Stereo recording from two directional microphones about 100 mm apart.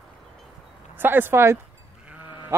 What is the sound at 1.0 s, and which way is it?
Speech, 20° right (ahead or behind).